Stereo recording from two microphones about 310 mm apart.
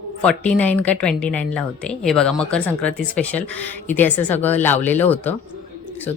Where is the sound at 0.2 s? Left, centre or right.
Centre.